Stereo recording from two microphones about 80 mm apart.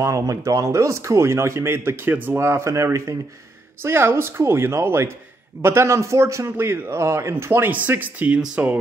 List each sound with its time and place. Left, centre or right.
0.0 s speech: right
2.3 s speech: right
3.8 s speech: right
6.5 s speech: right
7.7 s speech: right